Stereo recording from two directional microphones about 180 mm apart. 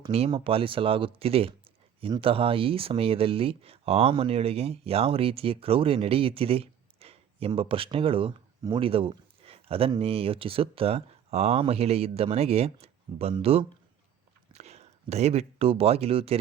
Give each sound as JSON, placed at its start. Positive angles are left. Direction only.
{"t": 0.0, "sound": "speech", "side_deg": -30}